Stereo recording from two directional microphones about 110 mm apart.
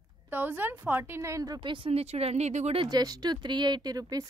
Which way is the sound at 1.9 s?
65° right (ahead or behind).